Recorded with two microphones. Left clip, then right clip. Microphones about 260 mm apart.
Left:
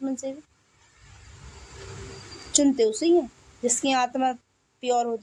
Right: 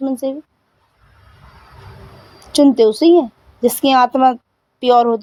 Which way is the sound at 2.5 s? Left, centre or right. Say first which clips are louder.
Right 10 dB; right.